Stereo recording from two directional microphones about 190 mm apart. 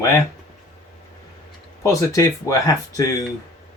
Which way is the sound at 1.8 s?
15° left (ahead or behind).